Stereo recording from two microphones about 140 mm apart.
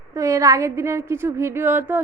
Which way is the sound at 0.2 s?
20° right (ahead or behind).